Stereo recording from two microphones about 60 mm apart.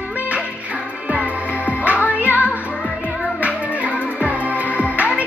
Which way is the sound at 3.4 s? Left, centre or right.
Right.